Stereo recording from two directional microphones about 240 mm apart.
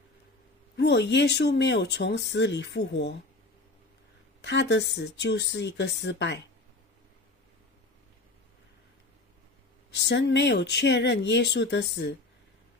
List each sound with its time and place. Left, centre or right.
0.7 s speech: left
4.4 s speech: left
9.8 s speech: left